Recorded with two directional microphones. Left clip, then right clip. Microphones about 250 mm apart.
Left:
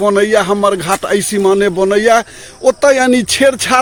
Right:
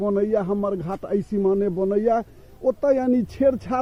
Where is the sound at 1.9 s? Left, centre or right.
Centre.